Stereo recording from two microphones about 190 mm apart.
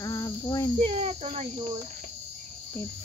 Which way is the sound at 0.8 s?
30° right (ahead or behind).